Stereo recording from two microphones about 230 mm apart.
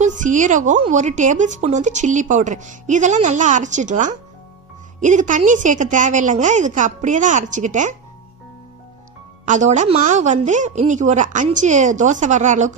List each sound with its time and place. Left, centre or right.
0.0 s speech: right
9.5 s speech: right